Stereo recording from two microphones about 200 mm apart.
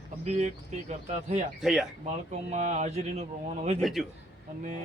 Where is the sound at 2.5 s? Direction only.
35° right (ahead or behind).